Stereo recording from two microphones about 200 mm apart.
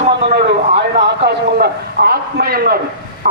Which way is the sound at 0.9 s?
55° right (ahead or behind).